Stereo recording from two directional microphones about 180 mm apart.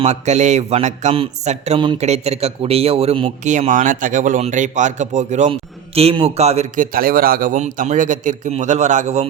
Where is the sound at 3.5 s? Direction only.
45° right (ahead or behind).